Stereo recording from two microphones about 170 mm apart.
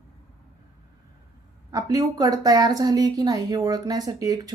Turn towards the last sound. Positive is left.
turn(degrees=-20)  # may be behind; listen again after turning